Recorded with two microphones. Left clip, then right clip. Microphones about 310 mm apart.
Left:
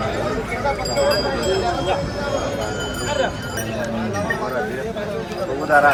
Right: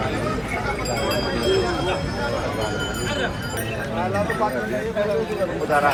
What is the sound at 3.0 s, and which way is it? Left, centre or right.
Music, left.